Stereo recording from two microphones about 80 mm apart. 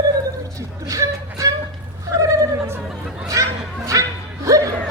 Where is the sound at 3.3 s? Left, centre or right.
Right.